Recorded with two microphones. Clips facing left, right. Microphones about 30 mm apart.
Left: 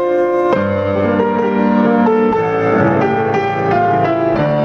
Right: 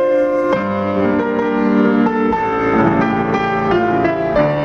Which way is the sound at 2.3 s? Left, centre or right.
Centre.